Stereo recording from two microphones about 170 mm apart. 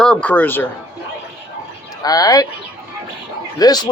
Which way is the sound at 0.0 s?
5° left (ahead or behind).